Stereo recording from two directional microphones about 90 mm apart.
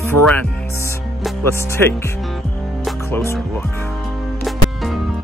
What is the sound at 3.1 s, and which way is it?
Speech, 30° left (ahead or behind).